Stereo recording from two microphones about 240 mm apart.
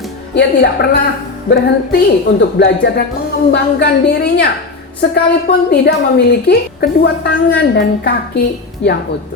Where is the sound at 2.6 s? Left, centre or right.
Left.